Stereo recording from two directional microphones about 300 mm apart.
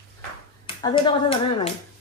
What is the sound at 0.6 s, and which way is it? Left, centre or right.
Speech, centre.